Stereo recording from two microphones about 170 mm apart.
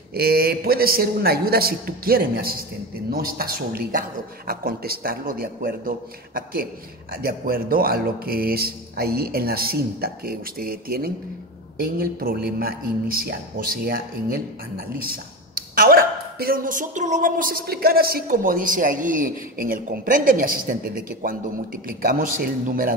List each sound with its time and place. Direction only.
0.1 s a woman's voice: 65° right (ahead or behind)